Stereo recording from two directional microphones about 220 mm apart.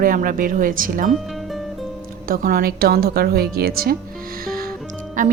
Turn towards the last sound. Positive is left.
turn(degrees=-35)  # may be behind; listen again after turning